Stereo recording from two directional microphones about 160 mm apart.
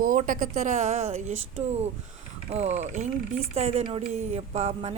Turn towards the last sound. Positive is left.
turn(degrees=-40)  # may be behind; listen again after turning